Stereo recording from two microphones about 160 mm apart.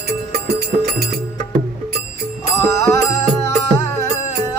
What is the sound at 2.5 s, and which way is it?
Music, 20° left (ahead or behind).